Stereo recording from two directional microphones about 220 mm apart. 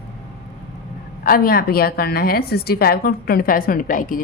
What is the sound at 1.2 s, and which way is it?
A woman's voice, 40° left (ahead or behind).